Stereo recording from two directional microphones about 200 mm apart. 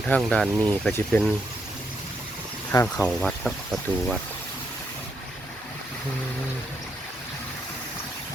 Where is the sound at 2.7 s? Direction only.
10° left (ahead or behind).